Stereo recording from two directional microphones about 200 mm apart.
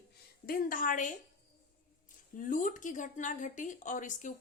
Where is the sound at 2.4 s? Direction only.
40° left (ahead or behind).